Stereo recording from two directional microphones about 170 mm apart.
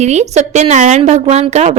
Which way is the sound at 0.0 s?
40° right (ahead or behind).